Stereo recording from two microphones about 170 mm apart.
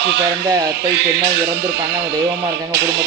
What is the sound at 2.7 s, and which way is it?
Speech, 70° right (ahead or behind).